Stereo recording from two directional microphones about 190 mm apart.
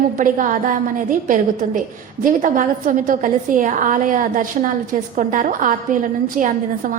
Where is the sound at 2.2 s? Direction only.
45° right (ahead or behind).